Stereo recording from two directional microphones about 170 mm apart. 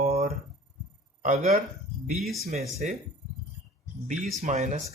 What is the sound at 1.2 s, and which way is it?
Speech, 50° right (ahead or behind).